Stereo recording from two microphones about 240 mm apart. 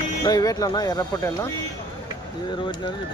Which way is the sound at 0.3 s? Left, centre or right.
Centre.